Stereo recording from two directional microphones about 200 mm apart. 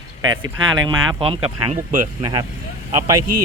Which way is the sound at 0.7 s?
20° right (ahead or behind).